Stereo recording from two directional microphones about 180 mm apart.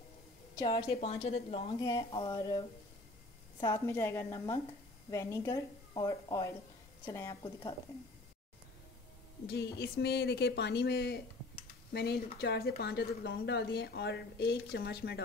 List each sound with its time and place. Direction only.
0.6 s a woman's voice: 25° left (ahead or behind)
3.6 s a woman's voice: 15° left (ahead or behind)
9.5 s speech: 65° left (ahead or behind)